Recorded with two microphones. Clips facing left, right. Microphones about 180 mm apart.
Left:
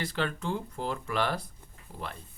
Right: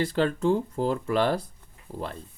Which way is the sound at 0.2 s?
40° right (ahead or behind).